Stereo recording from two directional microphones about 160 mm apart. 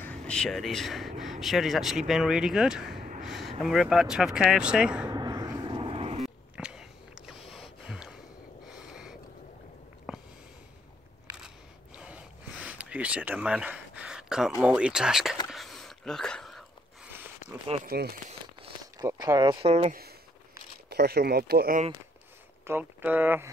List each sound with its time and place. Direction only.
0.0 s speech: 5° left (ahead or behind)
5.1 s a sound: 25° right (ahead or behind)
6.2 s a sound: 5° right (ahead or behind)
11.3 s camera: 5° right (ahead or behind)
14.6 s speech: 5° right (ahead or behind)
15.5 s a sound: centre (ahead or behind)
17.8 s speech: 75° right (ahead or behind)
18.9 s speech: 20° right (ahead or behind)
19.6 s speech: 40° right (ahead or behind)
19.9 s speech: 75° right (ahead or behind)
22.7 s speech: 10° right (ahead or behind)